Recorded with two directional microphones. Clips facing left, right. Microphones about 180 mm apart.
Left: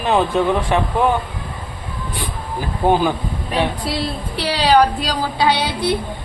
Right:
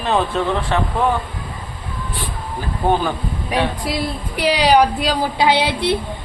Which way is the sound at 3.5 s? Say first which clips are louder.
Even; 10° right (ahead or behind).